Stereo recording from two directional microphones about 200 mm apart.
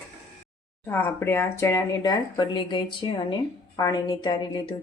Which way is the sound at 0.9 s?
10° left (ahead or behind).